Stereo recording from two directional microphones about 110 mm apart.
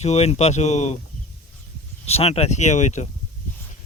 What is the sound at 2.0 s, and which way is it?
Speech, 70° left (ahead or behind).